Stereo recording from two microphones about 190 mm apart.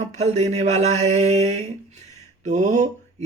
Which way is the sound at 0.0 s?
35° right (ahead or behind).